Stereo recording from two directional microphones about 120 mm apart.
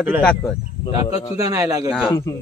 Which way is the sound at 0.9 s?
30° right (ahead or behind).